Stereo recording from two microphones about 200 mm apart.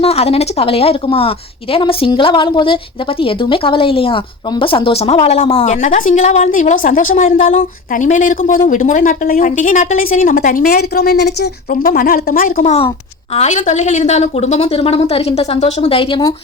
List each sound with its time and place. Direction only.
0.0 s a woman's voice: 30° left (ahead or behind)